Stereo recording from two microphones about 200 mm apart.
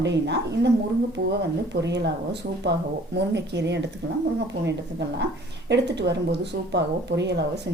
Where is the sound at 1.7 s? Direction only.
60° right (ahead or behind).